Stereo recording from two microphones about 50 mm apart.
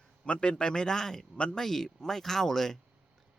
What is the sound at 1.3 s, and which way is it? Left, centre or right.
Speech, left.